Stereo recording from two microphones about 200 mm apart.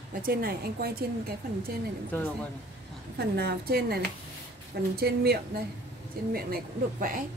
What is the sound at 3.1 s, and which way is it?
Speech, 55° right (ahead or behind).